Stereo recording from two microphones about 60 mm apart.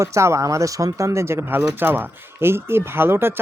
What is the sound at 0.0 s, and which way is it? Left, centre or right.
Speech, right.